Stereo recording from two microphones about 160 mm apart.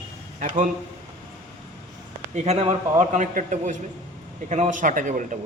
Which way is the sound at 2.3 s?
45° right (ahead or behind).